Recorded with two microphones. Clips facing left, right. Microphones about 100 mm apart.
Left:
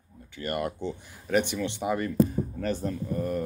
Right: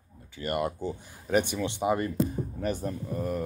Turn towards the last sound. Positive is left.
turn(degrees=-10)  # may be behind; listen again after turning